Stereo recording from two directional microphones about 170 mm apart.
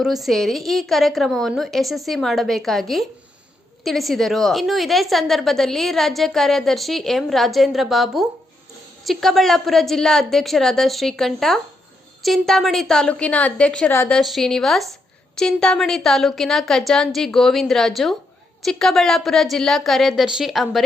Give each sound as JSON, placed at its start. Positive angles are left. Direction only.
{"t": 0.0, "sound": "a woman's voice", "side_deg": 0}